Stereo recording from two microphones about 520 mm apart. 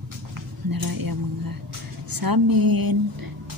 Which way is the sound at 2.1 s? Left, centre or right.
Right.